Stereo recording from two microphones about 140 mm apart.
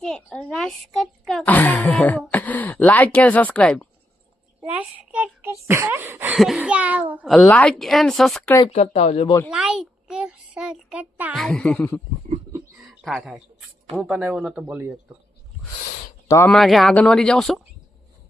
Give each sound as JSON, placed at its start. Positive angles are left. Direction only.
{"t": 0.0, "sound": "a woman's voice", "side_deg": 5}
{"t": 1.5, "sound": "speech", "side_deg": 10}
{"t": 4.6, "sound": "speech", "side_deg": -10}
{"t": 6.3, "sound": "speech", "side_deg": -5}
{"t": 7.3, "sound": "a woman's voice", "side_deg": 0}
{"t": 8.6, "sound": "speech", "side_deg": 50}
{"t": 9.5, "sound": "a child's voice", "side_deg": -5}
{"t": 11.3, "sound": "speech", "side_deg": 5}
{"t": 12.8, "sound": "a sound", "side_deg": -5}
{"t": 13.9, "sound": "speech", "side_deg": -5}
{"t": 16.5, "sound": "a woman's voice", "side_deg": 0}